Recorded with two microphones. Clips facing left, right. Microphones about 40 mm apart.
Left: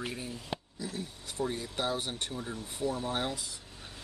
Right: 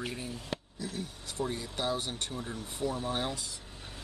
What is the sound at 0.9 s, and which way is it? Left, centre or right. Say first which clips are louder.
Speech: even; left.